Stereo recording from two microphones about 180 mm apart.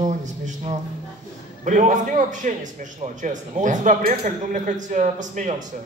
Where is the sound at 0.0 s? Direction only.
45° right (ahead or behind).